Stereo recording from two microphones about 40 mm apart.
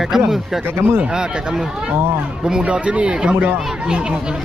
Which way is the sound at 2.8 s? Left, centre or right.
Right.